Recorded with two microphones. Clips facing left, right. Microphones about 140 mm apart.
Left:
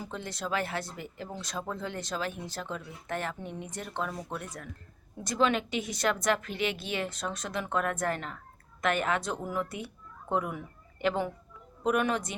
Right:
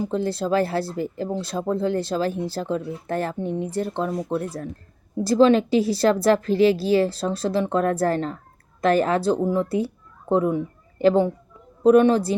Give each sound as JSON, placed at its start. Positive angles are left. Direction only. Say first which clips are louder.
{"t": 0.0, "sound": "a woman's voice", "louder": "right 13 dB", "side_deg": -30}